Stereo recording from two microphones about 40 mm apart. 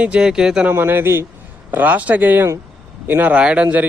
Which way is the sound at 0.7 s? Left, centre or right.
Right.